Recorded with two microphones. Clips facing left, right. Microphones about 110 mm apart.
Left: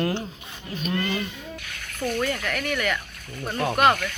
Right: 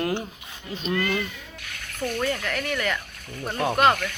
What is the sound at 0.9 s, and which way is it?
Speech, 20° left (ahead or behind).